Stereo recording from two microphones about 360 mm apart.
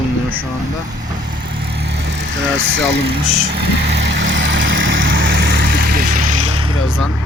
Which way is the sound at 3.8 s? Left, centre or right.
Right.